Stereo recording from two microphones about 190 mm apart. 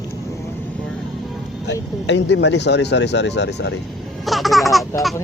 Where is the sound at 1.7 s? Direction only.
65° left (ahead or behind).